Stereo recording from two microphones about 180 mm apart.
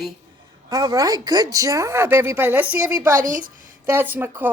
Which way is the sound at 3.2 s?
50° right (ahead or behind).